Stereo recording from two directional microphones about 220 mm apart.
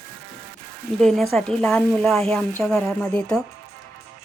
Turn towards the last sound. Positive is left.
turn(degrees=5)  # may be behind; listen again after turning